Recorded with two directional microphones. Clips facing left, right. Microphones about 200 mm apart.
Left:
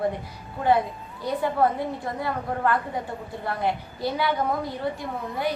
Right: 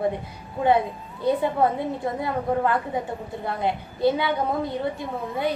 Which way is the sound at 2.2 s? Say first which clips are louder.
Right 4 dB; 20° right (ahead or behind).